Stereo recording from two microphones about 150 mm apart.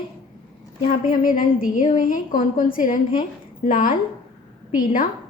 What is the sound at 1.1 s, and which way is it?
A woman's voice, 65° left (ahead or behind).